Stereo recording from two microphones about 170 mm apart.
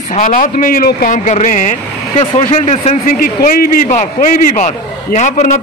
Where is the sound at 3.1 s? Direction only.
55° left (ahead or behind).